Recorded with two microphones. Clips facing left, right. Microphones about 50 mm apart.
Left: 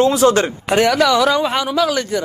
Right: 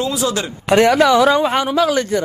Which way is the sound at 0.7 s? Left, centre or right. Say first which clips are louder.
Right 2 dB; right.